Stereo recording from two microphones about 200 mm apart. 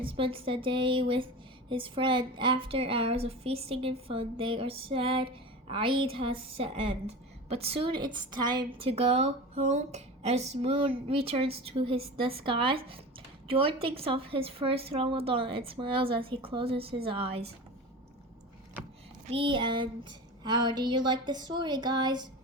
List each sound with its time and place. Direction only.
0.0 s a woman's voice: 25° right (ahead or behind)
19.3 s a woman's voice: 25° right (ahead or behind)